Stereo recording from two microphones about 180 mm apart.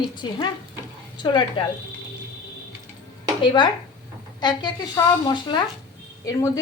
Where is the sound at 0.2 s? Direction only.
25° left (ahead or behind).